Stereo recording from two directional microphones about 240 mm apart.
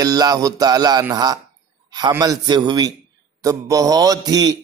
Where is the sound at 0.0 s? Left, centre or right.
Centre.